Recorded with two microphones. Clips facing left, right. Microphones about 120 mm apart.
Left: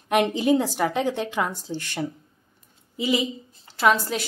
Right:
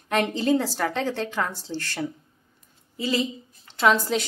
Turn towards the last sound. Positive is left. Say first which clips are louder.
# even
turn(degrees=5)  # may be behind; listen again after turning